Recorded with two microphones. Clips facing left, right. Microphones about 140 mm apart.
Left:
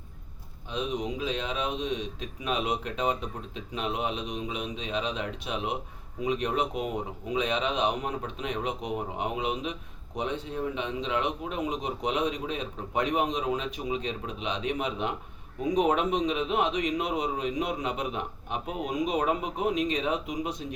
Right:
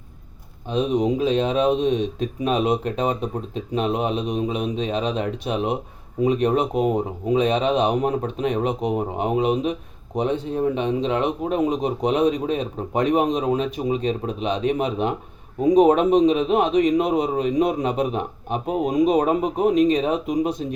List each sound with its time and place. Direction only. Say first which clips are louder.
0.7 s speech: right 11 dB; 35° right (ahead or behind)